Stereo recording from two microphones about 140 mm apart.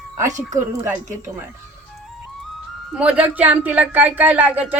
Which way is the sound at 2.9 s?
10° right (ahead or behind).